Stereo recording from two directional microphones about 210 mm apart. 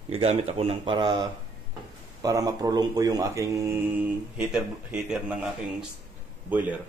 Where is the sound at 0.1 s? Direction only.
30° right (ahead or behind).